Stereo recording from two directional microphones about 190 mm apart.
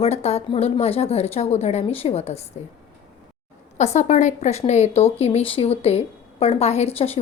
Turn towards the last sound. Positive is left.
turn(degrees=30)  # may be behind; listen again after turning